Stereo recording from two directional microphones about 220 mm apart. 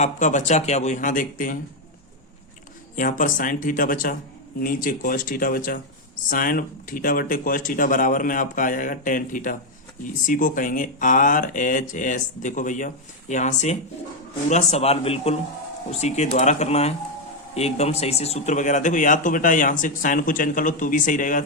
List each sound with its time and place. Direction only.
0.0 s speech: 35° left (ahead or behind)
2.9 s a man's voice: 35° left (ahead or behind)